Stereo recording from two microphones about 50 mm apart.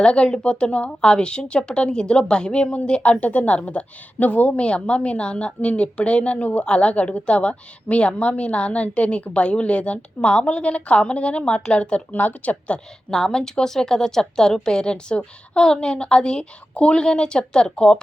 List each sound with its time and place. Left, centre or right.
0.0 s a woman's voice: centre
13.1 s a woman's voice: centre